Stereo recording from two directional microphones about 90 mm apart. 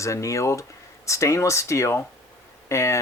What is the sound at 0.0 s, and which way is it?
Speech, 35° left (ahead or behind).